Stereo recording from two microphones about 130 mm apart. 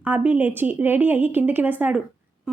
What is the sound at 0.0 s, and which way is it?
Speech, 10° right (ahead or behind).